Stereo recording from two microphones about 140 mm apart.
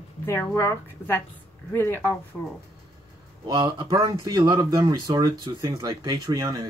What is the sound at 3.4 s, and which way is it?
Speech, 30° right (ahead or behind).